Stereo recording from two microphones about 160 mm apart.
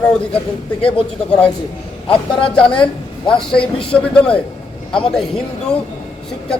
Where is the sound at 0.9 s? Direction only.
5° left (ahead or behind).